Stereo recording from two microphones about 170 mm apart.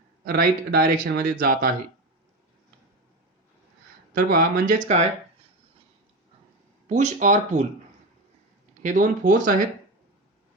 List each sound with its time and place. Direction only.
0.3 s speech: 65° right (ahead or behind)
4.1 s speech: 60° right (ahead or behind)
6.8 s speech: 45° right (ahead or behind)
8.8 s speech: 50° right (ahead or behind)